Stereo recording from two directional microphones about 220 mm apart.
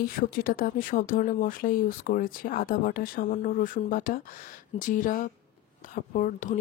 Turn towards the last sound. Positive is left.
turn(degrees=35)  # may be behind; listen again after turning